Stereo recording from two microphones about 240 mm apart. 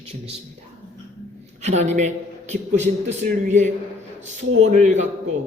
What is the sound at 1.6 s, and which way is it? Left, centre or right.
A man's voice, right.